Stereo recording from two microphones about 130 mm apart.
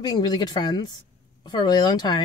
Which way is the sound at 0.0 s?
30° left (ahead or behind).